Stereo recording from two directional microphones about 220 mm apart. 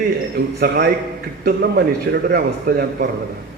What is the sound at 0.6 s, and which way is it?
A man's voice, 45° right (ahead or behind).